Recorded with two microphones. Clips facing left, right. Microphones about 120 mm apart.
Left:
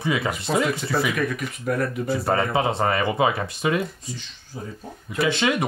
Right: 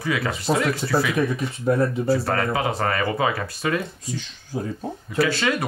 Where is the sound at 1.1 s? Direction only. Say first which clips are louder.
Right 3 dB; 30° right (ahead or behind).